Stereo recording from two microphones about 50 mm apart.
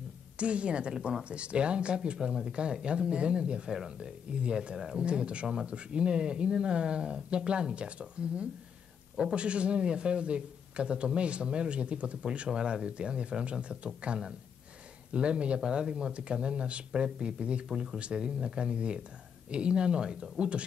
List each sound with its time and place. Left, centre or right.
0.4 s speech: right